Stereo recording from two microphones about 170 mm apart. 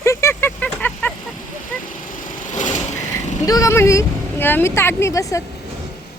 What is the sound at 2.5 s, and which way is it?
Vehicle, 45° left (ahead or behind).